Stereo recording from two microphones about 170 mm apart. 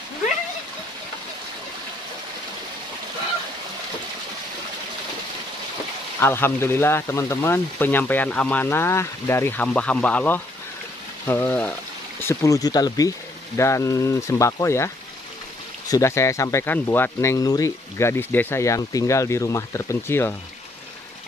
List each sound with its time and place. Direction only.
6.1 s speech: 15° left (ahead or behind)
15.9 s speech: 15° left (ahead or behind)